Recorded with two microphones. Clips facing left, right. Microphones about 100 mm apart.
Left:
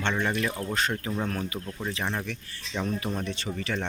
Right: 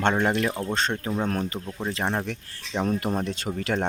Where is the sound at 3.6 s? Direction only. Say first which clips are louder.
Right 6 dB; 50° right (ahead or behind).